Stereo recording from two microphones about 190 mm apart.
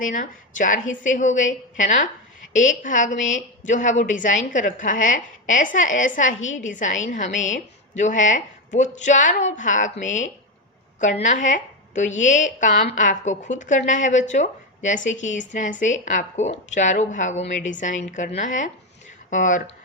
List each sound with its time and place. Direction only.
0.0 s a woman's voice: 45° left (ahead or behind)